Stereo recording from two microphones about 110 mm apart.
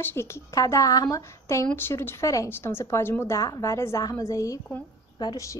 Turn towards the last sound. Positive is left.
turn(degrees=40)  # may be behind; listen again after turning